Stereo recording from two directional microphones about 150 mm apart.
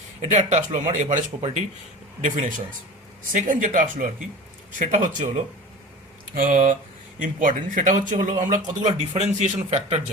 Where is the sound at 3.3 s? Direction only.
60° right (ahead or behind).